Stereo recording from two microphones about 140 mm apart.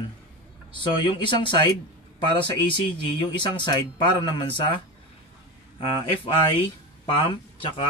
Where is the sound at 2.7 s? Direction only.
35° left (ahead or behind).